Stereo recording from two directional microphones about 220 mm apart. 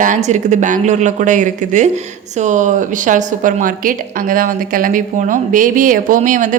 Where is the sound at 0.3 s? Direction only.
35° right (ahead or behind).